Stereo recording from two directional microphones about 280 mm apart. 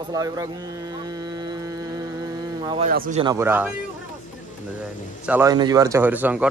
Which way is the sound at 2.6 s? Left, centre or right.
Centre.